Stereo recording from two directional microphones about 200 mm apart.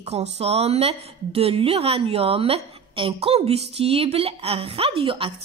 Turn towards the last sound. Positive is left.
turn(degrees=-25)  # may be behind; listen again after turning